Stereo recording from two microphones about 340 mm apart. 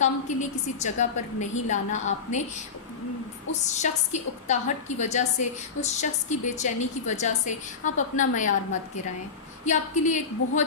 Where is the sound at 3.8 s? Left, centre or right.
Left.